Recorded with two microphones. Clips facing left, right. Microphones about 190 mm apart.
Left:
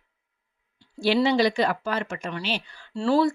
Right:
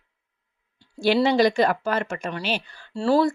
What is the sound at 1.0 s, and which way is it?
Speech, 45° right (ahead or behind).